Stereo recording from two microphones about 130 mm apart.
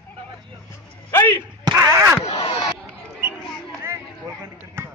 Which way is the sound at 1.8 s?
20° right (ahead or behind).